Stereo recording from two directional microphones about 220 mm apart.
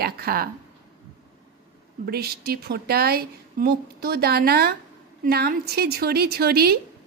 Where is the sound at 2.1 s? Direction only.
45° right (ahead or behind).